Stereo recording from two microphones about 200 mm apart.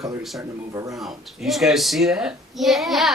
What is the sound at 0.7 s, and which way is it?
Speech, 15° right (ahead or behind).